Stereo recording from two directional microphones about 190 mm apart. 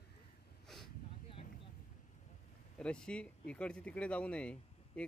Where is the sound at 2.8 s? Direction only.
5° left (ahead or behind).